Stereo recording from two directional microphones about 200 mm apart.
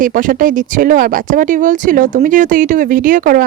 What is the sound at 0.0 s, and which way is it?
Speech, 40° right (ahead or behind).